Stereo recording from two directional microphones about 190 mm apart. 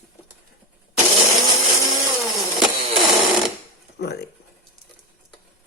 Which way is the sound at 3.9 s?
60° left (ahead or behind).